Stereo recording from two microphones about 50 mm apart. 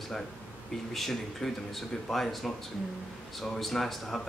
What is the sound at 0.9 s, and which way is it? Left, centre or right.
Speech, centre.